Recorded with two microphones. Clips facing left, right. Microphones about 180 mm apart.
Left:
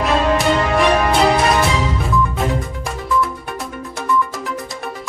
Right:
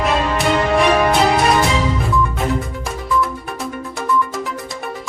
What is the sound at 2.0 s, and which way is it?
Music, centre (ahead or behind).